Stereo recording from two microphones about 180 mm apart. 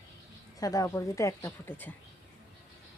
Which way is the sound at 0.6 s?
20° left (ahead or behind).